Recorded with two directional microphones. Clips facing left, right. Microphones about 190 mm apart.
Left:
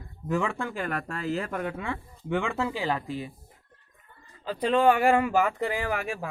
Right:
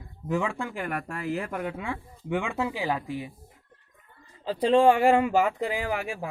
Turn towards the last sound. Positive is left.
turn(degrees=-15)  # may be behind; listen again after turning